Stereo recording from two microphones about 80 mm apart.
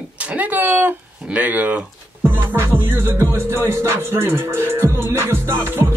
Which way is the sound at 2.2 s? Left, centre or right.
Right.